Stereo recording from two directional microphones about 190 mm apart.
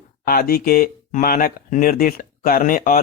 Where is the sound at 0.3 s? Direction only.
50° left (ahead or behind).